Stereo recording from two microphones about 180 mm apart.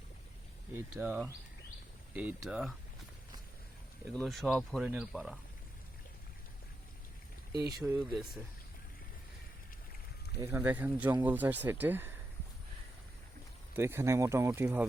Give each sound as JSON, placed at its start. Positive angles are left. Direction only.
{"t": 0.7, "sound": "speech", "side_deg": -10}
{"t": 4.2, "sound": "speech", "side_deg": 0}
{"t": 7.8, "sound": "speech", "side_deg": -5}
{"t": 10.4, "sound": "speech", "side_deg": -15}
{"t": 13.7, "sound": "speech", "side_deg": -15}